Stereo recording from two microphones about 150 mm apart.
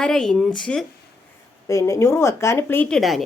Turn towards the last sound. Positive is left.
turn(degrees=0)  # may be behind; listen again after turning